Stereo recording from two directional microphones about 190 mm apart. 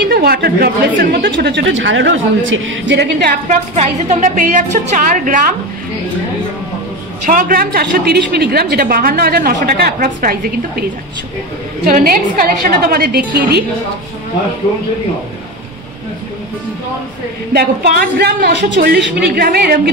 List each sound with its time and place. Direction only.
0.1 s a woman's voice: 55° right (ahead or behind)
3.4 s a woman's voice: 40° right (ahead or behind)
7.2 s a woman's voice: 45° right (ahead or behind)
17.5 s a woman's voice: 55° right (ahead or behind)